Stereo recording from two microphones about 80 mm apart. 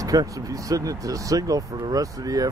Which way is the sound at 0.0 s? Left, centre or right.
Right.